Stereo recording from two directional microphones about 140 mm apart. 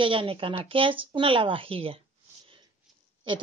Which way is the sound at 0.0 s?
40° right (ahead or behind).